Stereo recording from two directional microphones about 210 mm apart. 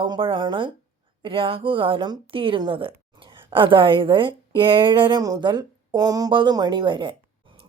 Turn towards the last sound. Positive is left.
turn(degrees=-25)  # may be behind; listen again after turning